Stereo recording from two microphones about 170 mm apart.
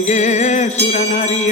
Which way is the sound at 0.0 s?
45° left (ahead or behind).